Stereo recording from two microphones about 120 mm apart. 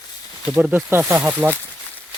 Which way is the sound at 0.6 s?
20° right (ahead or behind).